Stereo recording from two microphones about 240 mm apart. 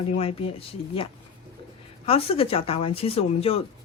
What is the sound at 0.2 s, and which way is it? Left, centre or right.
Speech, left.